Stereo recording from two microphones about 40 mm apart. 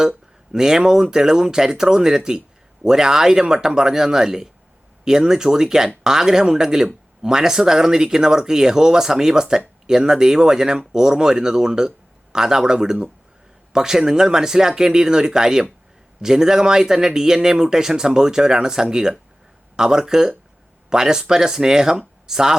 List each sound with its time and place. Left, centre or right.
0.5 s speech: centre